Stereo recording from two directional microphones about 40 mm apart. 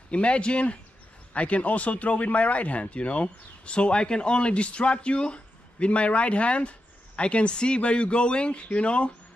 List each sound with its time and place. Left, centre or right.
0.1 s speech: left